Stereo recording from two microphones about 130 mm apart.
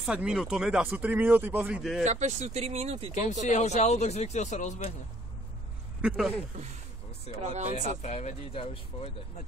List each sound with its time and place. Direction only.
0.0 s speech: 5° right (ahead or behind)
2.0 s speech: 65° right (ahead or behind)
3.4 s speech: 65° left (ahead or behind)
5.9 s speech: 5° right (ahead or behind)
7.4 s speech: 60° right (ahead or behind)
8.0 s speech: 60° left (ahead or behind)